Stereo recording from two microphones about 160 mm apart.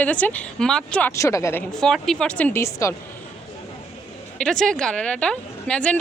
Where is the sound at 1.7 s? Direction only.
5° left (ahead or behind).